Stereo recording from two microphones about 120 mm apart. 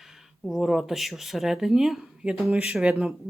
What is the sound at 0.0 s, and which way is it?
Speech, centre (ahead or behind).